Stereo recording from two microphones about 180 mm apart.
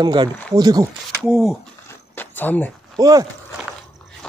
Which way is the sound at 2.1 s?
10° left (ahead or behind).